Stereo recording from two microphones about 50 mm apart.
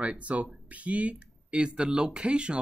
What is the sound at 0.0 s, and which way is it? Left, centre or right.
Speech, right.